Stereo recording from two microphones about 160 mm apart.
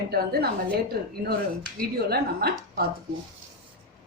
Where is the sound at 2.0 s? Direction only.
75° right (ahead or behind).